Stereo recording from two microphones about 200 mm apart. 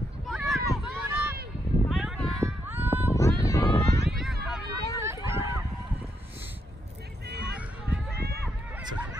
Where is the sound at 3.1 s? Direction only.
15° left (ahead or behind).